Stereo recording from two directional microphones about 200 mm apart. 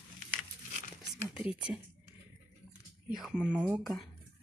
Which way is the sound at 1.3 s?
5° right (ahead or behind).